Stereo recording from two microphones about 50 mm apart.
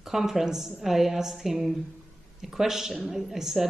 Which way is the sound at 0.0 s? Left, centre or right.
Centre.